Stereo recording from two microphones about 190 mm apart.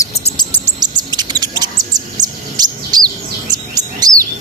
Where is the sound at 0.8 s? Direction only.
20° right (ahead or behind).